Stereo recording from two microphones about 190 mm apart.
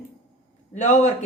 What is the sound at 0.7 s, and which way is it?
Speech, 35° left (ahead or behind).